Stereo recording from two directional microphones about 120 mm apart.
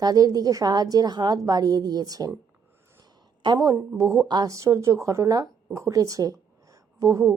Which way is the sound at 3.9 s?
25° right (ahead or behind).